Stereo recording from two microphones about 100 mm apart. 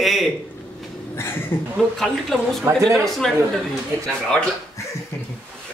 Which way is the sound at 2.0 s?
5° left (ahead or behind).